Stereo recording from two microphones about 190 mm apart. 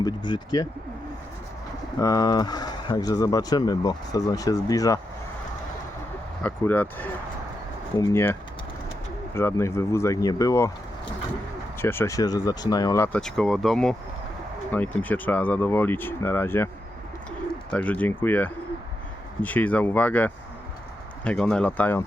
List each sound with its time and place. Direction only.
0.3 s speech: 20° left (ahead or behind)
2.0 s speech: 20° left (ahead or behind)
6.4 s speech: 10° left (ahead or behind)
11.8 s speech: 10° left (ahead or behind)
13.1 s speech: 5° left (ahead or behind)
17.7 s speech: 10° left (ahead or behind)